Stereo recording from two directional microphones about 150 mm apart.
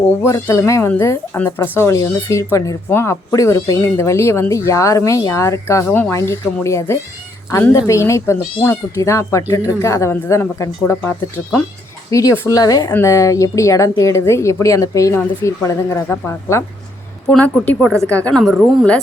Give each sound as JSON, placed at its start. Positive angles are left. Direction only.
{"t": 0.2, "sound": "speech", "side_deg": 15}
{"t": 12.1, "sound": "a woman's voice", "side_deg": 20}